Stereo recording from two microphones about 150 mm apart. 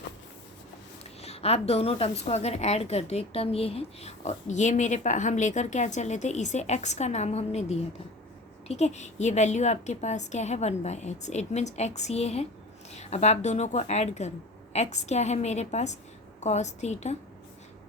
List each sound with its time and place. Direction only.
1.2 s a woman's voice: 45° left (ahead or behind)